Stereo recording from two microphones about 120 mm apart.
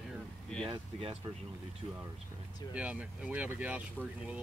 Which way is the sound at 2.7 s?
10° right (ahead or behind).